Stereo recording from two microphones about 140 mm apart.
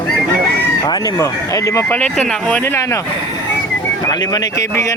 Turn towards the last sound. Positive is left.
turn(degrees=25)  # may be behind; listen again after turning